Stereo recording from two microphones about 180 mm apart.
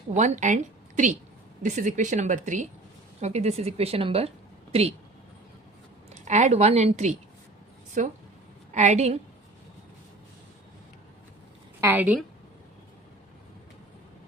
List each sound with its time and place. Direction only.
0.1 s a woman's voice: 40° right (ahead or behind)
6.2 s a woman's voice: 40° right (ahead or behind)
11.8 s a woman's voice: 10° right (ahead or behind)